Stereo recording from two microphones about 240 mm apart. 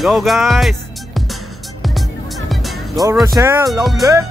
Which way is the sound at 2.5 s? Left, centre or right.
Centre.